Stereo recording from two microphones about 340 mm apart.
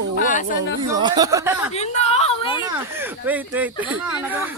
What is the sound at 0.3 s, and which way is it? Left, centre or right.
Speech, left.